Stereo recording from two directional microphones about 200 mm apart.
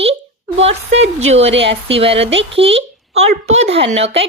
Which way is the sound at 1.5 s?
65° right (ahead or behind).